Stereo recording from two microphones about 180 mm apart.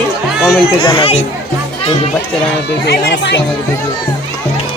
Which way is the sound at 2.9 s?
70° left (ahead or behind).